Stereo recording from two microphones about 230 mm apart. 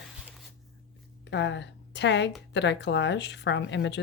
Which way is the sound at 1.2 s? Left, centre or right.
Left.